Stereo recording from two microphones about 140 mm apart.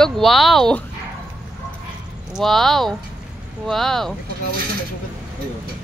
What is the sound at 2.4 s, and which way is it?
Speech, centre (ahead or behind).